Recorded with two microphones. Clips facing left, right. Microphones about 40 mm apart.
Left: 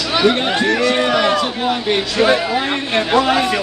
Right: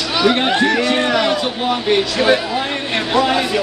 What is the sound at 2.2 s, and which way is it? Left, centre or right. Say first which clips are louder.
Speech: left 1 dB; centre.